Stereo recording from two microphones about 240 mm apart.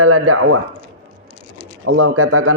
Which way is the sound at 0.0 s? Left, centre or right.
Right.